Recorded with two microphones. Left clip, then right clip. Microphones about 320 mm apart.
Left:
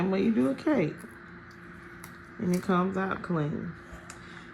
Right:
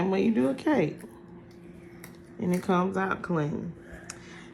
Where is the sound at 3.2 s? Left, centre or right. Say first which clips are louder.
Right 2 dB; right.